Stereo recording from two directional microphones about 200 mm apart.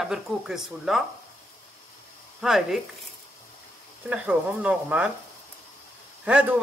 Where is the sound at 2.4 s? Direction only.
Centre (ahead or behind).